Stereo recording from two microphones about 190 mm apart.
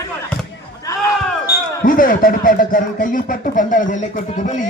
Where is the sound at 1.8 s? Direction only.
45° left (ahead or behind).